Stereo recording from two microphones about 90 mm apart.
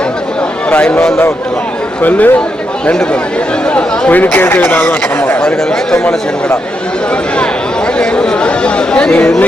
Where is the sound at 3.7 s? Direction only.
15° left (ahead or behind).